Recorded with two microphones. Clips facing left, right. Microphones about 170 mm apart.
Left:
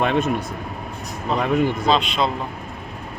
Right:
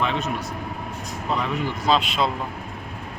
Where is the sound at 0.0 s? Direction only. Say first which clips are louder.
Left 5 dB; 55° left (ahead or behind).